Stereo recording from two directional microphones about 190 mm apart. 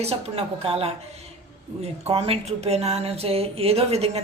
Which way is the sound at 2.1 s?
30° right (ahead or behind).